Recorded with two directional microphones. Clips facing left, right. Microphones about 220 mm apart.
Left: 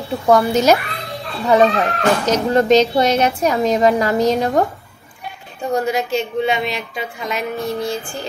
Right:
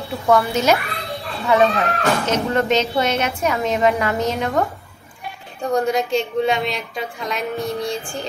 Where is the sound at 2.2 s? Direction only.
35° left (ahead or behind).